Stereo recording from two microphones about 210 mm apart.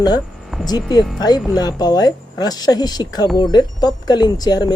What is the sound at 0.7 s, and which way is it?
Speech, 20° left (ahead or behind).